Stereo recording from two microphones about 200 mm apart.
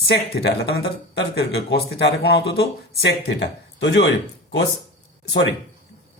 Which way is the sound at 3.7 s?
60° left (ahead or behind).